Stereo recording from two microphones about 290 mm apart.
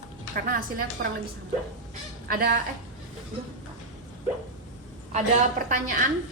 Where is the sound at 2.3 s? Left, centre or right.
Right.